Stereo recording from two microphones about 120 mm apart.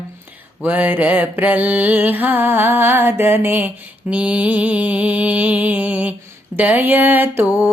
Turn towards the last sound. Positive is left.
turn(degrees=-15)  # may be behind; listen again after turning